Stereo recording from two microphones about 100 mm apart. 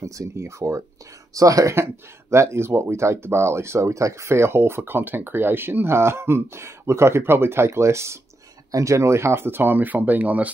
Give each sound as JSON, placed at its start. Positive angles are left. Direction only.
{"t": 0.0, "sound": "speech", "side_deg": -30}